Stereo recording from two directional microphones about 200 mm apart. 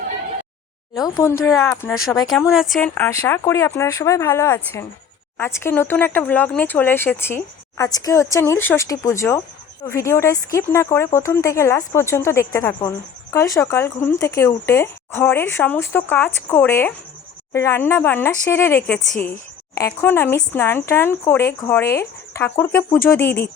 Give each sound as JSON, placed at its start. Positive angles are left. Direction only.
{"t": 0.9, "sound": "speech", "side_deg": 20}